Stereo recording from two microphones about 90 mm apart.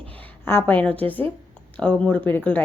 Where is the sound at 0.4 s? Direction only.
20° left (ahead or behind).